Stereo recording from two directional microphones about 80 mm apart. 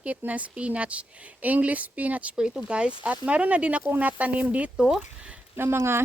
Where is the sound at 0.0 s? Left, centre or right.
Centre.